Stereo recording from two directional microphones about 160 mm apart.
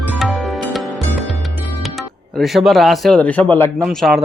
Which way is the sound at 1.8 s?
Centre (ahead or behind).